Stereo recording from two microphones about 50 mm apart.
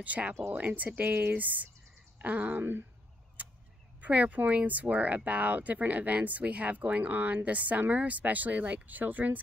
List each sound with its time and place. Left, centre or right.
0.0 s speech: right
4.0 s speech: right